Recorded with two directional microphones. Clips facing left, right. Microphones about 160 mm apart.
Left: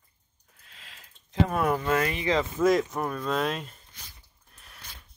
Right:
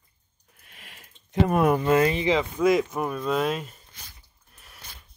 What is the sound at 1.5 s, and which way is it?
Speech, 20° right (ahead or behind).